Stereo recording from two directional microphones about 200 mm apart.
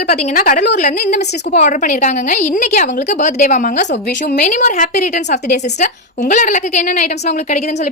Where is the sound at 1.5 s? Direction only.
40° left (ahead or behind).